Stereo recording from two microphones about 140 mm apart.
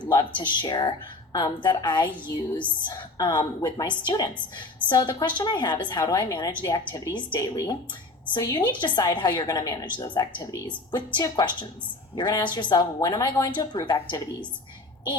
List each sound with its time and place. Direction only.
0.1 s a woman's voice: 30° left (ahead or behind)